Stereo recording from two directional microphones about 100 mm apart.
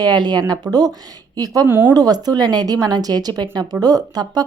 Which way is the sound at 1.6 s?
20° right (ahead or behind).